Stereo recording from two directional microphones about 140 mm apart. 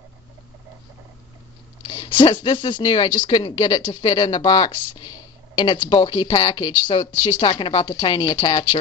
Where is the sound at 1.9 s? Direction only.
30° left (ahead or behind).